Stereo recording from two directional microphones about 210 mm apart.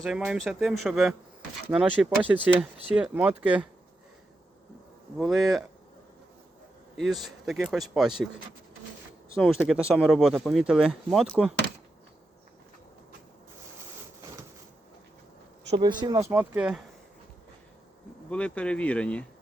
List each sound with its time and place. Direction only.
0.0 s speech: centre (ahead or behind)
5.1 s speech: centre (ahead or behind)
6.9 s speech: centre (ahead or behind)
9.4 s speech: centre (ahead or behind)
15.7 s speech: 20° right (ahead or behind); by 16.8 s 5° right (ahead or behind)
18.3 s speech: 5° left (ahead or behind)